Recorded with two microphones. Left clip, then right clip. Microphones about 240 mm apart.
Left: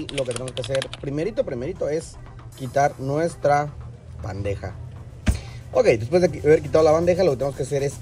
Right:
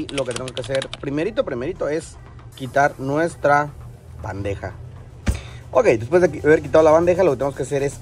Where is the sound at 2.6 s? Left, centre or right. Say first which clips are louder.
Right 3 dB; centre.